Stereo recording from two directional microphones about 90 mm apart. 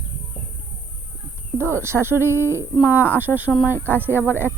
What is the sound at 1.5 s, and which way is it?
Speech, 30° right (ahead or behind).